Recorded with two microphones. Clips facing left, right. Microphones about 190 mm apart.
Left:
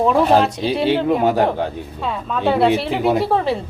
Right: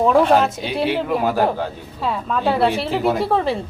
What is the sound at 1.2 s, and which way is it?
Speech, 20° left (ahead or behind).